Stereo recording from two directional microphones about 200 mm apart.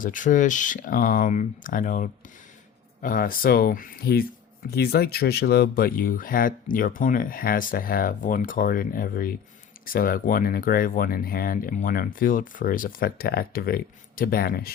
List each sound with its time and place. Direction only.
0.0 s speech: 40° left (ahead or behind)